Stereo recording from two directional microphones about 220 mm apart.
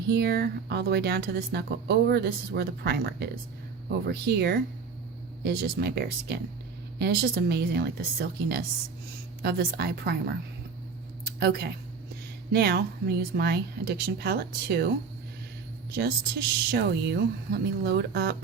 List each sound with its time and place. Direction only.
0.1 s speech: 45° right (ahead or behind)
15.9 s speech: 45° right (ahead or behind)